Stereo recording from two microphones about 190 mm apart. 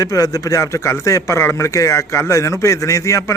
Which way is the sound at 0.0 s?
15° left (ahead or behind).